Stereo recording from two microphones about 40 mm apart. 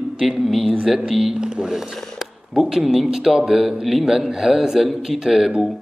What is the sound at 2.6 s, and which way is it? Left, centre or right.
A man's voice, centre.